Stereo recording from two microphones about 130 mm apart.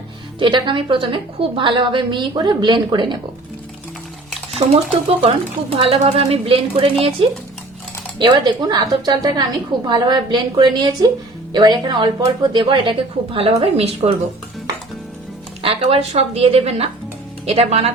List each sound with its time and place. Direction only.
0.3 s a woman's voice: 35° right (ahead or behind)
4.5 s a woman's voice: 50° right (ahead or behind)
8.2 s a woman's voice: 35° right (ahead or behind); by 14.1 s 50° right (ahead or behind)
15.6 s a woman's voice: 45° right (ahead or behind)